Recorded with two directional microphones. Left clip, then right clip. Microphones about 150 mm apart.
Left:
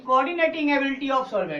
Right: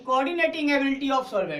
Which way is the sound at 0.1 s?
40° right (ahead or behind).